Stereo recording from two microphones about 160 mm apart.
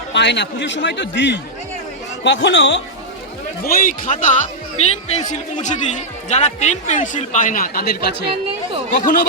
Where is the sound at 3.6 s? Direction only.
55° left (ahead or behind).